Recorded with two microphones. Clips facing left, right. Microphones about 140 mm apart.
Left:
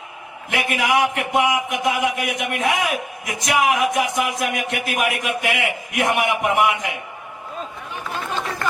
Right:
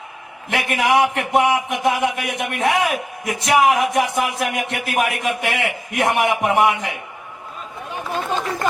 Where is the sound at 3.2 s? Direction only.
30° right (ahead or behind).